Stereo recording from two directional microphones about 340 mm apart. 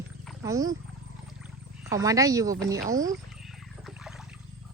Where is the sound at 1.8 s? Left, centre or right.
Centre.